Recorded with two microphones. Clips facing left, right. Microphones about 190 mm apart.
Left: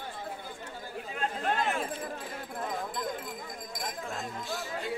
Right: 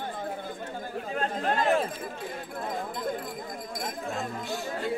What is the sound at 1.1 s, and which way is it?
Chatter, 40° right (ahead or behind).